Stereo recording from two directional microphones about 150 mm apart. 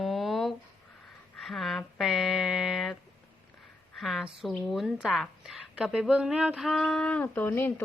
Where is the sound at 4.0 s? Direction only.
Centre (ahead or behind).